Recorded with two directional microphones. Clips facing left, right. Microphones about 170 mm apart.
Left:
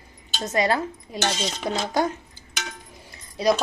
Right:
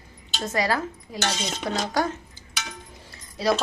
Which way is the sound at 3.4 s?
20° left (ahead or behind).